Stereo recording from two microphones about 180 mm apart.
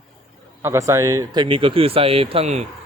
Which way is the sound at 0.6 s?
15° right (ahead or behind).